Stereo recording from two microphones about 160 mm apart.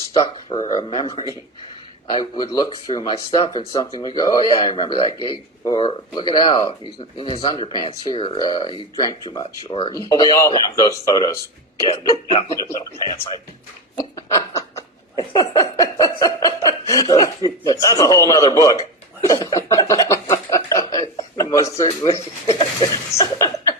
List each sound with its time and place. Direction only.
0.1 s speech: 25° left (ahead or behind)
3.4 s speech: 35° left (ahead or behind)
3.7 s speech: 25° left (ahead or behind)
12.5 s speech: 20° left (ahead or behind)
14.0 s snicker: 20° left (ahead or behind)
19.3 s speech: 20° left (ahead or behind)
23.1 s a sound: 20° left (ahead or behind)